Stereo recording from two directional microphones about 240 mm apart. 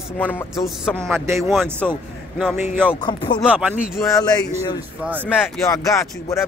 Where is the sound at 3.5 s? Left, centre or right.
Centre.